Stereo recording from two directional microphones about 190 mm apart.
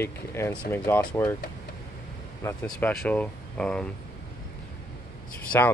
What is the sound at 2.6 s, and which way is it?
Speech, 5° left (ahead or behind).